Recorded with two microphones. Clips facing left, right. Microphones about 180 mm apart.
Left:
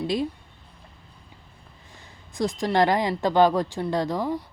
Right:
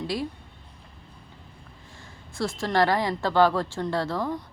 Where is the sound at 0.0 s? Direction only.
20° left (ahead or behind).